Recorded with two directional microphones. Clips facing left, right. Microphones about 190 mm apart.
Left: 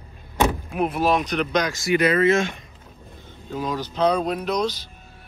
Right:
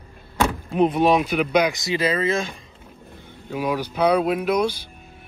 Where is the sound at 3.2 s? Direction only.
15° right (ahead or behind).